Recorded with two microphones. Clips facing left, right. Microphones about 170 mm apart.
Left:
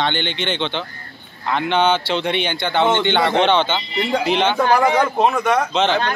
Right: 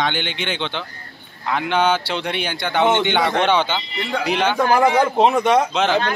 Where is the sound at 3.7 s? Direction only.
15° left (ahead or behind).